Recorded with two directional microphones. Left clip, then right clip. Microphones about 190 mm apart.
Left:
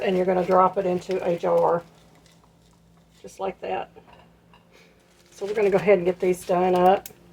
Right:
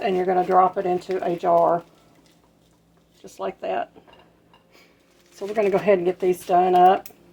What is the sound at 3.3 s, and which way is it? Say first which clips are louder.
Speech: right 1 dB; 35° right (ahead or behind).